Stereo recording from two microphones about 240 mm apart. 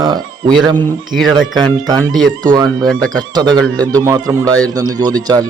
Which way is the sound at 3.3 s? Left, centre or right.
Centre.